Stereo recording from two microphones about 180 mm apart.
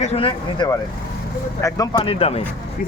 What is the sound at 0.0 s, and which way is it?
Speech, 35° left (ahead or behind).